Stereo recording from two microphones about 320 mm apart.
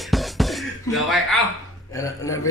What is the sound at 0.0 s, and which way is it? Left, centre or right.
Music, centre.